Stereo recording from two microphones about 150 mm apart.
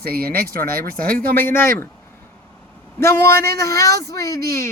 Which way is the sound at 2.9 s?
15° left (ahead or behind).